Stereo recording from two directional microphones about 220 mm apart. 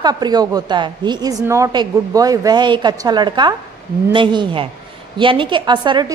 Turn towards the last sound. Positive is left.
turn(degrees=-20)  # may be behind; listen again after turning